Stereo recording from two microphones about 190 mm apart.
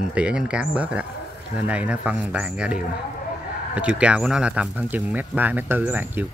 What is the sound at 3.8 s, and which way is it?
Speech, 5° right (ahead or behind).